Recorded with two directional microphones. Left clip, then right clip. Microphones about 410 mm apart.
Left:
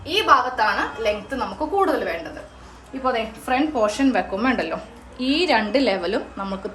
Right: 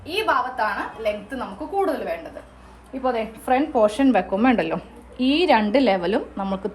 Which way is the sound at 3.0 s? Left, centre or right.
Centre.